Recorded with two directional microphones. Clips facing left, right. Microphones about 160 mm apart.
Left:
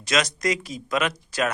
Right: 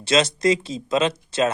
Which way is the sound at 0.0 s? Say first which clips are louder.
Right 5 dB; 30° right (ahead or behind).